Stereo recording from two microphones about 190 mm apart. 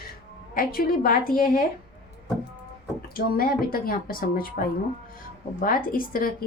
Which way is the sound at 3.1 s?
50° left (ahead or behind).